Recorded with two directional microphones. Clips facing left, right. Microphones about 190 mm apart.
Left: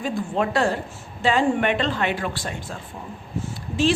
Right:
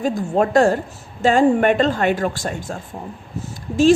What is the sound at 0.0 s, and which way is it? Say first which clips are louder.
A woman's voice: right 5 dB; 45° right (ahead or behind).